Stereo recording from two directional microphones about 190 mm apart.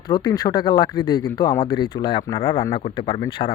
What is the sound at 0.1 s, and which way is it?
A man's voice, 20° left (ahead or behind).